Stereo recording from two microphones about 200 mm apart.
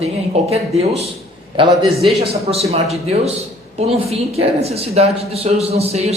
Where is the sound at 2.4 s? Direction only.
30° right (ahead or behind).